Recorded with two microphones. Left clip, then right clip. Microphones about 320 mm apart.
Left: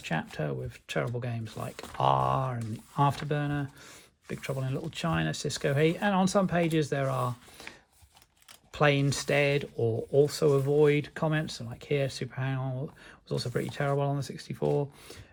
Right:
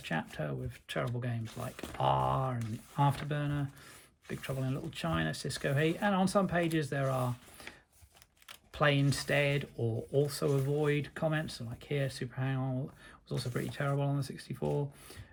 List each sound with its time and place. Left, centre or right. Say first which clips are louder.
0.0 s speech: left 4 dB; centre
8.7 s speech: left 4 dB; centre
9.7 s speech: left 7 dB; left
10.2 s speech: left 7 dB; centre